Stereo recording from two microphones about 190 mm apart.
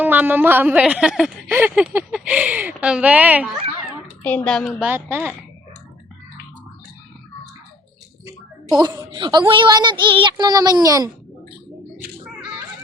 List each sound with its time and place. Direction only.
0.0 s a woman's voice: 10° right (ahead or behind)
4.2 s a woman's voice: 5° left (ahead or behind)
4.9 s a woman's voice: 10° right (ahead or behind)
8.9 s speech: 20° right (ahead or behind)